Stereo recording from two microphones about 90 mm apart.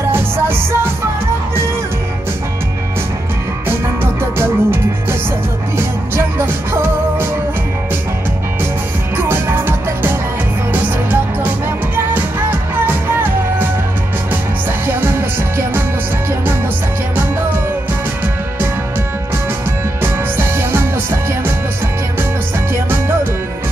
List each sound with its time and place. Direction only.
0.1 s music: 25° right (ahead or behind)
4.2 s music: 25° right (ahead or behind)
6.1 s music: 25° right (ahead or behind)
9.1 s music: 25° right (ahead or behind)
11.9 s music: 20° right (ahead or behind)
14.9 s music: 25° right (ahead or behind)
20.0 s music: 25° right (ahead or behind)